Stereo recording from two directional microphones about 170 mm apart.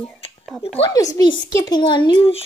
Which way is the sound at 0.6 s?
30° left (ahead or behind).